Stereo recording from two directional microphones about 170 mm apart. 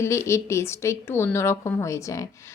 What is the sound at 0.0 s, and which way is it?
A woman's voice, 15° left (ahead or behind).